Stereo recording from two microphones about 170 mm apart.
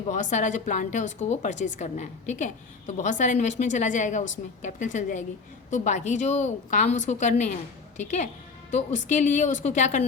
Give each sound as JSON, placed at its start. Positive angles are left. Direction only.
{"t": 0.1, "sound": "a woman's voice", "side_deg": 45}